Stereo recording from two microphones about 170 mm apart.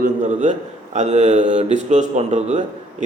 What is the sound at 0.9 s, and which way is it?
Speech, 40° right (ahead or behind).